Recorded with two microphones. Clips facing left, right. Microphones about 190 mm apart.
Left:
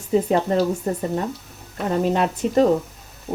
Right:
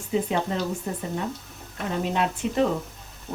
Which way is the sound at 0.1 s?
40° left (ahead or behind).